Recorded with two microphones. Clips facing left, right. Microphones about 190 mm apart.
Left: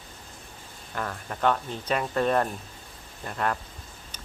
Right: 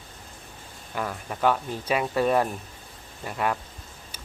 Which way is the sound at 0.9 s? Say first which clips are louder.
Right 2 dB; 10° right (ahead or behind).